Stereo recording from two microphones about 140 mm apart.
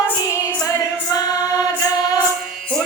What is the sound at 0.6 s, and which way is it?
Singing, 25° left (ahead or behind).